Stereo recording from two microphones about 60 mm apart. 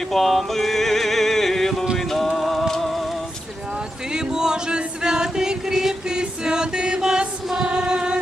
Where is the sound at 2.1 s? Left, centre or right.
Centre.